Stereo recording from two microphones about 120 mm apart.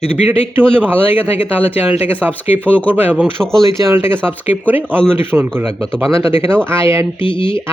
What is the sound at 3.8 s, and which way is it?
Speech, 20° right (ahead or behind).